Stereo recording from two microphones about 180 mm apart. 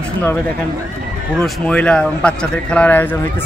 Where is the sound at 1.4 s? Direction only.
5° left (ahead or behind).